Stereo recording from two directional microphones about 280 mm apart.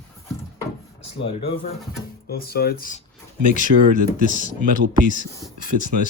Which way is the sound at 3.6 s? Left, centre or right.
Right.